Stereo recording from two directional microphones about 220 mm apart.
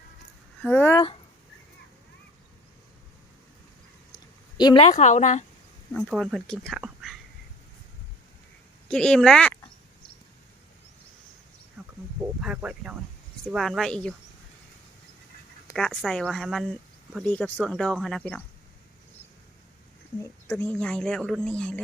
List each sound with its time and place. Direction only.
0.6 s speech: 10° left (ahead or behind)
4.5 s speech: 20° left (ahead or behind)
5.9 s speech: 5° left (ahead or behind)
8.9 s speech: 5° left (ahead or behind)
11.8 s wild animals: 10° right (ahead or behind)
12.4 s speech: 5° right (ahead or behind)
15.6 s speech: 5° left (ahead or behind)
20.5 s speech: 10° left (ahead or behind)